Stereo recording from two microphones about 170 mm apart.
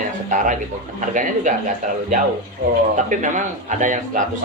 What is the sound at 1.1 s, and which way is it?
Speech, 50° right (ahead or behind).